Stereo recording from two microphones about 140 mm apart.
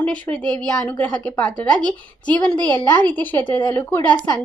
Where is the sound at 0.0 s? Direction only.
10° left (ahead or behind).